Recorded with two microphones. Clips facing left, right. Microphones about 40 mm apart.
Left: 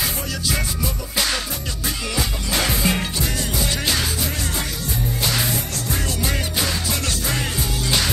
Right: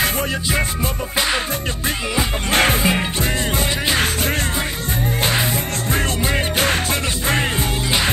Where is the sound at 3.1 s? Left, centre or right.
Right.